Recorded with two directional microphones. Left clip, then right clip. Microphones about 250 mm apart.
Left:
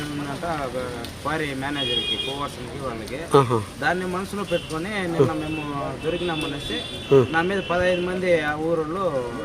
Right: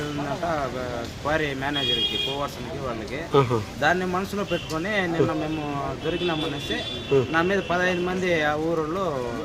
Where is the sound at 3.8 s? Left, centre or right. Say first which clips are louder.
Right 2 dB; centre.